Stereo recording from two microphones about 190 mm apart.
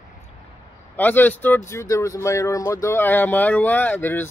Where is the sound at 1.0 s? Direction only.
10° left (ahead or behind).